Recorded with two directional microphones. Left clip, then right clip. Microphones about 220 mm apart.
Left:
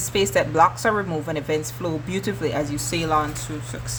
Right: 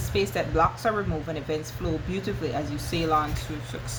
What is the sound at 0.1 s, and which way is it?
Speech, 35° left (ahead or behind).